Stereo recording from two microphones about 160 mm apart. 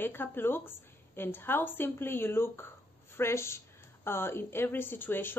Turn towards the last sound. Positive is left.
turn(degrees=15)  # may be behind; listen again after turning